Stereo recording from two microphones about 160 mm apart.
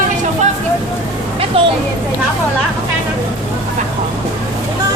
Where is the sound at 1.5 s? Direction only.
35° right (ahead or behind).